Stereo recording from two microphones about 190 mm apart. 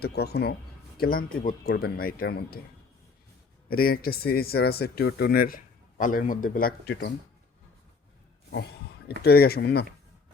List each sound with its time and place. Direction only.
0.0 s speech: 55° left (ahead or behind)
3.7 s speech: 50° left (ahead or behind)
9.2 s speech: 55° left (ahead or behind)